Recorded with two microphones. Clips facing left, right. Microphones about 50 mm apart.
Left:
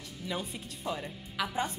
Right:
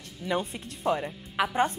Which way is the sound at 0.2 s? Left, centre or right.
Right.